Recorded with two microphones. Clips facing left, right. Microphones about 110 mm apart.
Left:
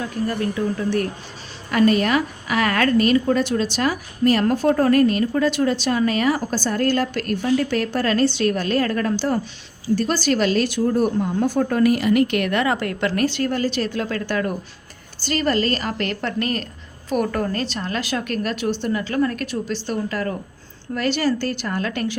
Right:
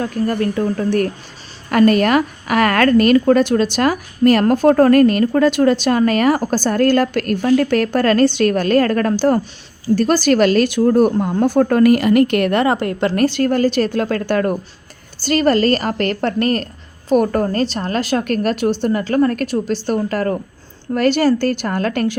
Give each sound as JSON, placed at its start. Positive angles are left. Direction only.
{"t": 0.0, "sound": "a woman's voice", "side_deg": -50}